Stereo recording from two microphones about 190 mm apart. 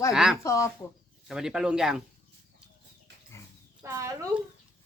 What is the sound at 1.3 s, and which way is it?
Speech, 5° right (ahead or behind).